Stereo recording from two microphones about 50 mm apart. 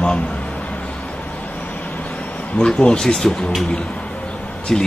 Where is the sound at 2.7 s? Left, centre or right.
Centre.